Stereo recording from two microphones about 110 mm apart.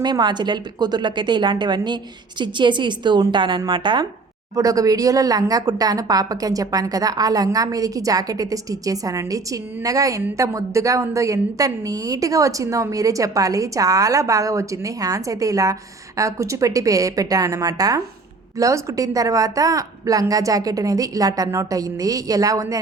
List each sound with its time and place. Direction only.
0.0 s a woman's voice: 40° right (ahead or behind)
4.5 s speech: 30° right (ahead or behind)